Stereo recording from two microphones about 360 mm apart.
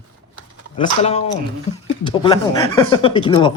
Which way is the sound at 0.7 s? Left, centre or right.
Centre.